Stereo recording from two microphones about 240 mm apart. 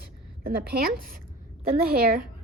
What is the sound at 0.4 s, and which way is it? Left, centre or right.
Speech, right.